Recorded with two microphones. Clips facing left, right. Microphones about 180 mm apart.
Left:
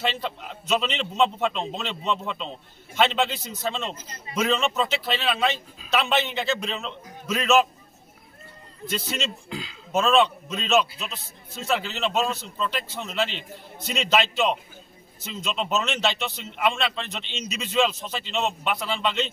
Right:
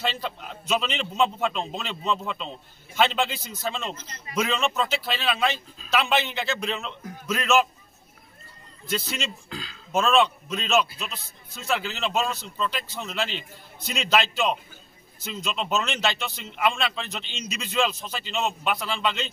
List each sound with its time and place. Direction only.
0.0 s a man's voice: centre (ahead or behind)
9.9 s a man's voice: centre (ahead or behind)